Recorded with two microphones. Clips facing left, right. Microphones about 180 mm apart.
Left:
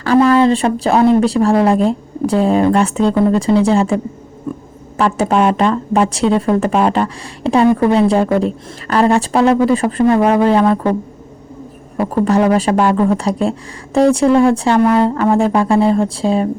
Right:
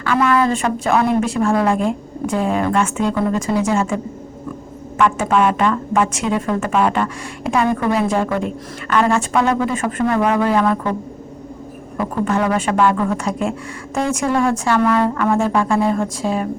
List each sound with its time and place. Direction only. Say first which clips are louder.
0.0 s speech: left 6 dB; 35° left (ahead or behind)
4.9 s speech: left 2 dB; 35° left (ahead or behind)
11.9 s speech: left 5 dB; 35° left (ahead or behind)